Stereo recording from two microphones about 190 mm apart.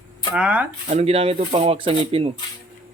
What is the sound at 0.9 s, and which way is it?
Speech, 35° right (ahead or behind).